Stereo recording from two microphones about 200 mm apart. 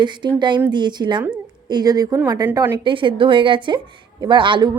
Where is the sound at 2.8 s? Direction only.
25° right (ahead or behind).